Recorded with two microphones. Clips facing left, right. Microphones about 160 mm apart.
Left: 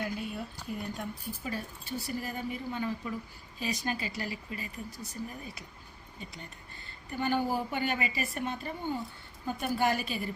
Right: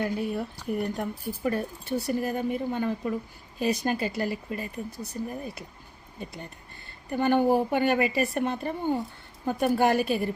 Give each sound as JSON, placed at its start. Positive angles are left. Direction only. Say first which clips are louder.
{"t": 0.0, "sound": "a woman's voice", "louder": "right 7 dB", "side_deg": -60}
{"t": 7.1, "sound": "a woman's voice", "louder": "right 8 dB", "side_deg": -50}